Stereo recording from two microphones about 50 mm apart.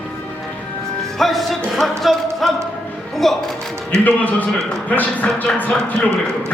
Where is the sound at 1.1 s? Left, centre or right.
Centre.